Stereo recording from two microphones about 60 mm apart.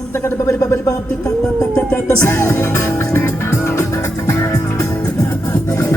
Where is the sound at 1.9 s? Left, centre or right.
Left.